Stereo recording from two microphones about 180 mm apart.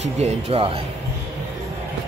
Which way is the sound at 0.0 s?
35° right (ahead or behind).